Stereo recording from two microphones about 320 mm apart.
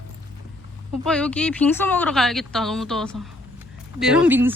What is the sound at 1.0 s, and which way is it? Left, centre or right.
Speech, centre.